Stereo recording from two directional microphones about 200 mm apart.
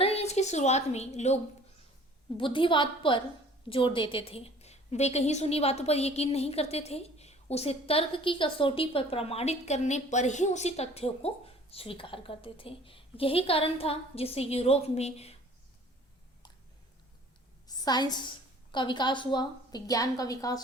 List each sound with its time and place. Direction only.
0.0 s a woman's voice: 30° left (ahead or behind)
2.4 s a woman's voice: 25° left (ahead or behind)
17.7 s a woman's voice: 20° left (ahead or behind)